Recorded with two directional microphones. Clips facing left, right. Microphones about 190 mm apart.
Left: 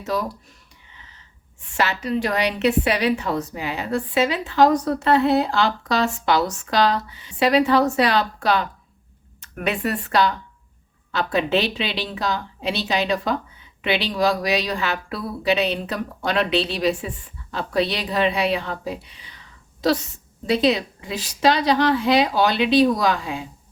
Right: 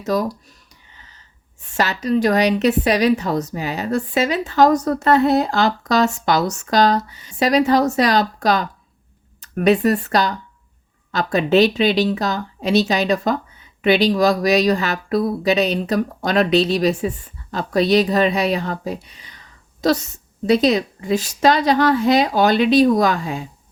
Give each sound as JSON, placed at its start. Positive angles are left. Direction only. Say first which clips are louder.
{"t": 0.0, "sound": "a woman's voice", "louder": "right 5 dB", "side_deg": -40}
{"t": 1.7, "sound": "a woman's voice", "louder": "right 4 dB", "side_deg": -40}
{"t": 20.5, "sound": "speech", "louder": "right 4 dB", "side_deg": -45}